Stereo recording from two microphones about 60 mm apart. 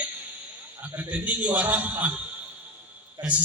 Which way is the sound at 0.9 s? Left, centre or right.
Right.